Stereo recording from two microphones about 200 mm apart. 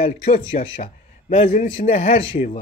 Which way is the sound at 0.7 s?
30° left (ahead or behind).